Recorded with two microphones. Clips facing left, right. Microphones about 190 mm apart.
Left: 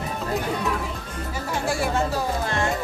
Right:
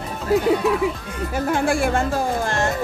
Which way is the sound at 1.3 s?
55° right (ahead or behind).